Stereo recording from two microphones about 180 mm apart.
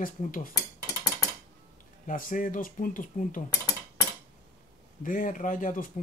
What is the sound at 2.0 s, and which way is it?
Speech, 50° left (ahead or behind).